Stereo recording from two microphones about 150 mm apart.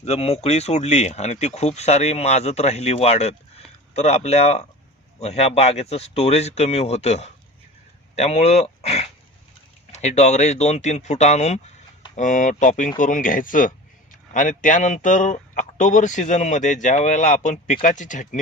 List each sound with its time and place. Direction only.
0.0 s a man's voice: 45° left (ahead or behind)